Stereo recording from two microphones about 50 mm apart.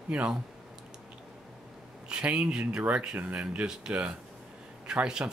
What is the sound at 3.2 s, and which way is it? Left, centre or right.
Speech, right.